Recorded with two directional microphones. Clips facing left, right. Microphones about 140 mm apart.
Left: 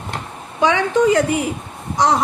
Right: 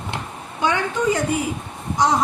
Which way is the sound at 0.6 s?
85° left.